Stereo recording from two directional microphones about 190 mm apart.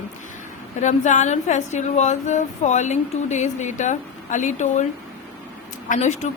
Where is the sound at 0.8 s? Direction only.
40° left (ahead or behind).